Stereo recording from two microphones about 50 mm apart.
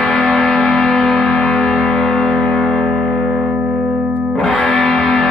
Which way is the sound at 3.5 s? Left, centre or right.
Centre.